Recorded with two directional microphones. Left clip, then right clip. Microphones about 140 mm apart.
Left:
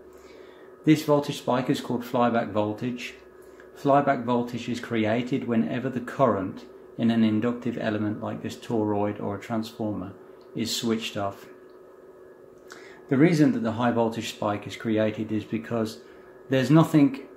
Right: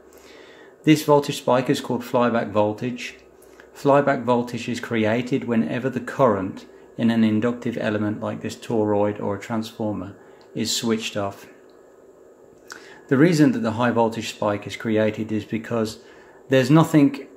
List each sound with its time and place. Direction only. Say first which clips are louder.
0.8 s speech: right 5 dB; 35° right (ahead or behind)
12.6 s speech: right 5 dB; 35° right (ahead or behind)